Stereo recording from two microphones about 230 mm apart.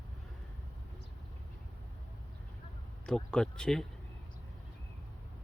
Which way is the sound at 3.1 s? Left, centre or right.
Centre.